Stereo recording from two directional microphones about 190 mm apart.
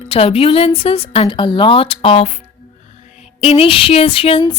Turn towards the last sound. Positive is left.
turn(degrees=30)  # may be behind; listen again after turning